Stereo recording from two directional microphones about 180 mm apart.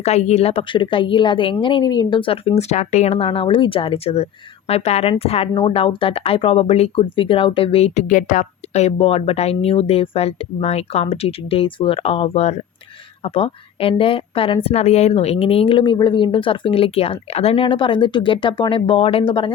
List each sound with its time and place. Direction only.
0.0 s a woman's voice: 40° left (ahead or behind)